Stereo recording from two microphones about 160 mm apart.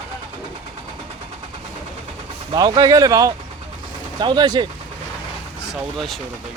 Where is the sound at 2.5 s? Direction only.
25° right (ahead or behind).